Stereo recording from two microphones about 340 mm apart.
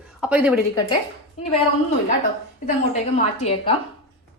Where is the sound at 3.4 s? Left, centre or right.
Centre.